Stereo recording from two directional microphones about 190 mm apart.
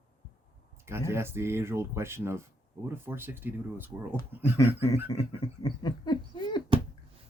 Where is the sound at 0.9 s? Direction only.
15° right (ahead or behind).